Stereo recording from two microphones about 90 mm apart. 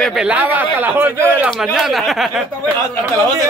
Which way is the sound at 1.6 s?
5° right (ahead or behind).